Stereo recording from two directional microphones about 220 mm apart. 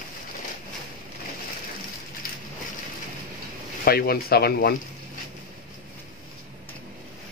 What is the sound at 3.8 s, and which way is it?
Speech, 45° left (ahead or behind).